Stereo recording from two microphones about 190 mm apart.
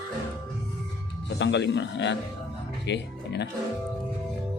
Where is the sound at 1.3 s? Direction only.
70° left (ahead or behind).